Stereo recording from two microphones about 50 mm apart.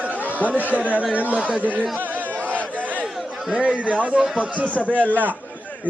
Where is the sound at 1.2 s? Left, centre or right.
Right.